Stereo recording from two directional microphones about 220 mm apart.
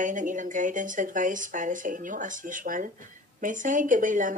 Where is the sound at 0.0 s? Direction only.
35° right (ahead or behind).